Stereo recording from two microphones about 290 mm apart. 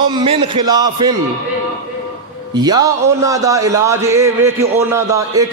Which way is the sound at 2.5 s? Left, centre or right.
Centre.